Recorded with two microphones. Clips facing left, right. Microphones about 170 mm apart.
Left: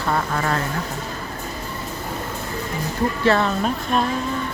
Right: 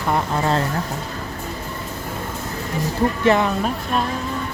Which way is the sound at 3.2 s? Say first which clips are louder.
Even; 15° right (ahead or behind).